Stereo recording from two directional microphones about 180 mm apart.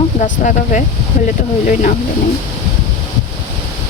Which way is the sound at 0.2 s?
45° left (ahead or behind).